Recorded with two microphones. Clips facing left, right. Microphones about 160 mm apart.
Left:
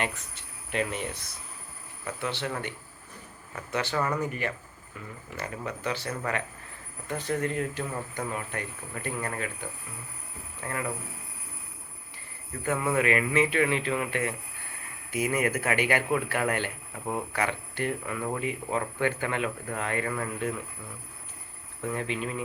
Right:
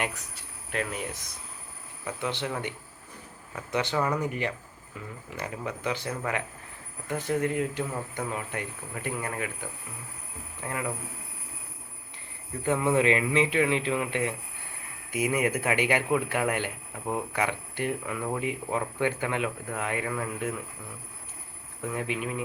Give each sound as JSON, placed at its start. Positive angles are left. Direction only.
{"t": 0.7, "sound": "speech", "side_deg": 0}
{"t": 2.0, "sound": "speech", "side_deg": -15}
{"t": 12.6, "sound": "speech", "side_deg": -20}
{"t": 21.9, "sound": "speech", "side_deg": -15}